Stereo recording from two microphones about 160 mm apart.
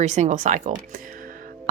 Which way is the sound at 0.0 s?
45° right (ahead or behind).